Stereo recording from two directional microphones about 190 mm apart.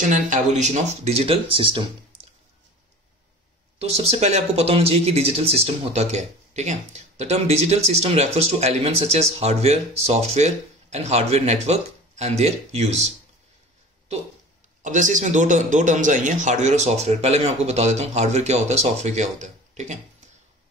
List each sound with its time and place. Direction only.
0.1 s speech: 40° right (ahead or behind)
3.8 s speech: 35° right (ahead or behind)
14.8 s speech: 40° right (ahead or behind)